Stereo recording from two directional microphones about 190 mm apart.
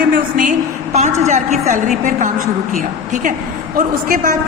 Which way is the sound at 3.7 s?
50° right (ahead or behind).